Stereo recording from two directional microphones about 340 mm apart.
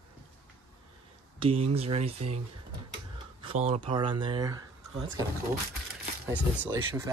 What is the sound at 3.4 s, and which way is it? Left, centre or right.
Speech, centre.